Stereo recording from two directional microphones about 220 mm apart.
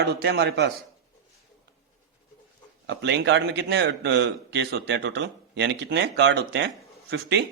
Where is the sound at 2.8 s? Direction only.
55° right (ahead or behind).